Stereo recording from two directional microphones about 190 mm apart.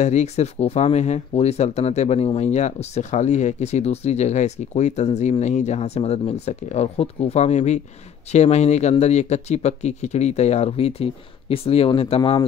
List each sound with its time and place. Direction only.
0.0 s speech: 35° left (ahead or behind)
12.2 s speech: 20° left (ahead or behind)